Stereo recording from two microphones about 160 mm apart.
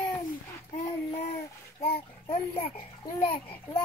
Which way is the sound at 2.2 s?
35° left (ahead or behind).